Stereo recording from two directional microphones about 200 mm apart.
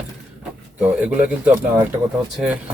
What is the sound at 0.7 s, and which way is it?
Speech, 5° right (ahead or behind).